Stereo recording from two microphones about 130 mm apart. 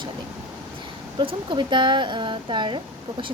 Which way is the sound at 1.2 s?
40° right (ahead or behind).